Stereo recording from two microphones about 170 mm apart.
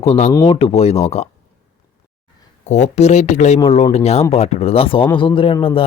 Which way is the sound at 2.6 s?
40° left (ahead or behind).